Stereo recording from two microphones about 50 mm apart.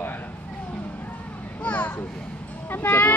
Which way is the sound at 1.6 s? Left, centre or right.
Left.